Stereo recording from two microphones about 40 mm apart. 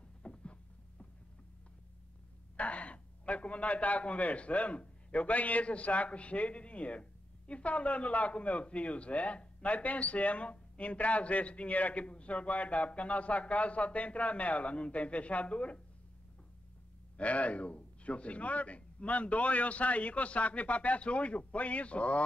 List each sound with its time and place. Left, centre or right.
0.2 s a sound: left
2.5 s speech: left
17.2 s speech: left